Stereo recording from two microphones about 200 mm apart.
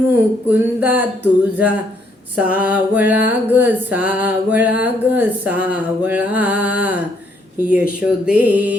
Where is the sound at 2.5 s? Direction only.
5° right (ahead or behind).